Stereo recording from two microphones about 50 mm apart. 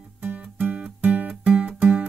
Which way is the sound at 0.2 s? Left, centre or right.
Right.